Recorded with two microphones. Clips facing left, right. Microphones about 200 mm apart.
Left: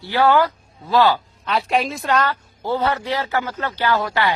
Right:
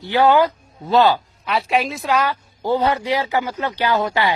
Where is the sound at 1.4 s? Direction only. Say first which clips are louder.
Even; 5° right (ahead or behind).